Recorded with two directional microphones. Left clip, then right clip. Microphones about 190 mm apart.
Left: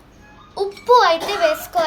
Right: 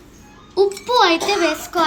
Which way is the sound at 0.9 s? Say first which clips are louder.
Left 4 dB; 45° left (ahead or behind).